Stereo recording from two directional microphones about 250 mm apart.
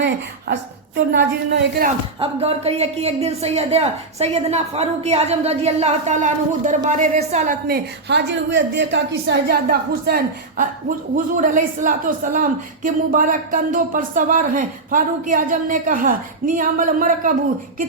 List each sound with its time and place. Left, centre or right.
0.0 s a woman's voice: right
2.1 s a man's voice: right